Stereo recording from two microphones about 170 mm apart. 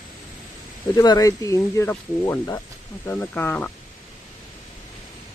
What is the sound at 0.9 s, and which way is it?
Speech, 20° left (ahead or behind).